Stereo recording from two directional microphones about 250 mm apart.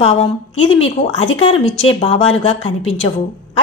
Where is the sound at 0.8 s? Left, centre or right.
Left.